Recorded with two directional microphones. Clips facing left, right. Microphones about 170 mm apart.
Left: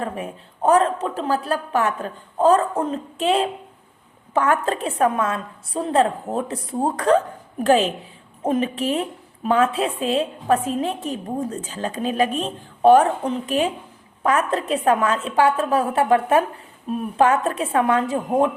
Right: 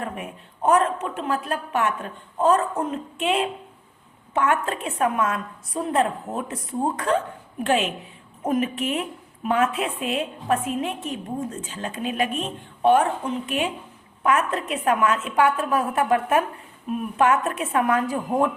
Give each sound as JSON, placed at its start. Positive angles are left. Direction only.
{"t": 0.0, "sound": "a woman's voice", "side_deg": 30}